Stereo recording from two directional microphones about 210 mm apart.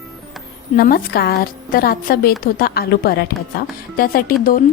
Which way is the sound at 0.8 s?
45° left (ahead or behind).